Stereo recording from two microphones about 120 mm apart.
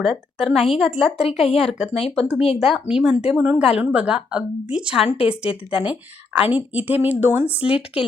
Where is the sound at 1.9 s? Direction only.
55° left (ahead or behind).